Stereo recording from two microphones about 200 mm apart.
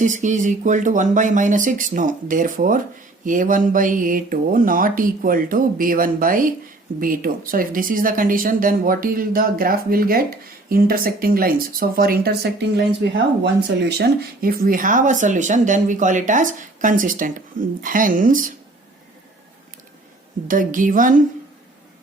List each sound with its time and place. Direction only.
0.0 s speech: 40° right (ahead or behind)
20.5 s speech: 40° right (ahead or behind)